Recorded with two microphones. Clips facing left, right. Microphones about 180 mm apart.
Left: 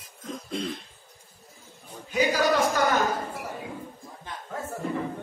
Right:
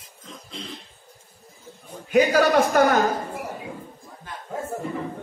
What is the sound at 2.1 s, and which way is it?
Speech, 55° right (ahead or behind).